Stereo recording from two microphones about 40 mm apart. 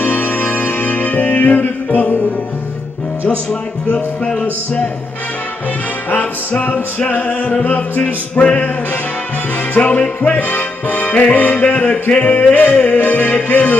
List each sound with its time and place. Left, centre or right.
0.0 s music: left
7.6 s music: left
9.8 s music: left
11.6 s music: left
13.0 s music: left